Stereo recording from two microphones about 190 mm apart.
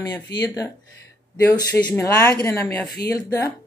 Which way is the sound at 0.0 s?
20° left (ahead or behind).